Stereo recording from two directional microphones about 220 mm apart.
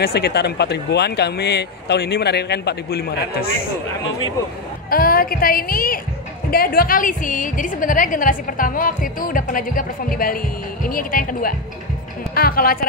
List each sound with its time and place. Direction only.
0.0 s speech: 45° left (ahead or behind)
4.8 s a woman's voice: 40° left (ahead or behind)